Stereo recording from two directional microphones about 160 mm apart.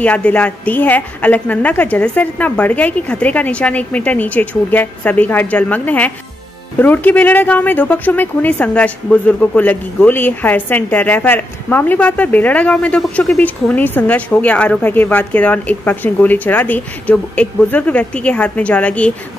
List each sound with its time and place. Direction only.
0.0 s speech: 10° left (ahead or behind)